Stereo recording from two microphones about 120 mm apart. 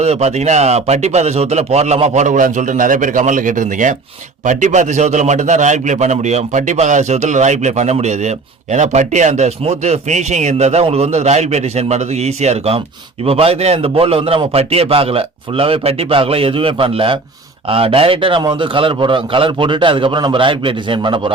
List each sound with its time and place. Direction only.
0.0 s a man's voice: 65° right (ahead or behind); by 21.3 s 45° right (ahead or behind)